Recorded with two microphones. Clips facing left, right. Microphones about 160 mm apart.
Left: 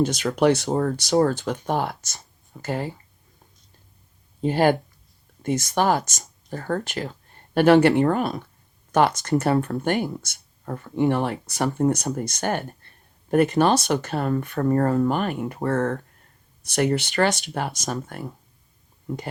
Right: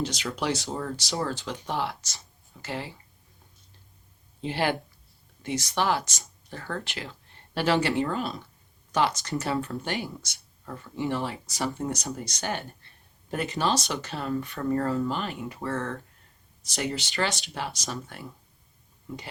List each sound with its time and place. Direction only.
0.0 s speech: 50° left (ahead or behind)
4.4 s speech: 45° left (ahead or behind)